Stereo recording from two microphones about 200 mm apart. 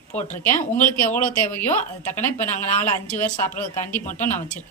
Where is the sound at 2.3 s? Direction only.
35° left (ahead or behind).